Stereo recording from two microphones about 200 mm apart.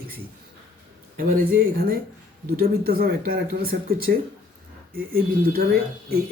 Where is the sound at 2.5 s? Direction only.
50° right (ahead or behind).